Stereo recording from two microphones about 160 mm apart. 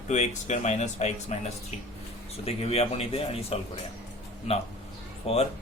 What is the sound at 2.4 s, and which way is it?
Speech, 40° left (ahead or behind).